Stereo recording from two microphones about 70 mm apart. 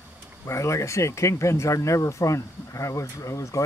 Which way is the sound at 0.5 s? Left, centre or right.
Left.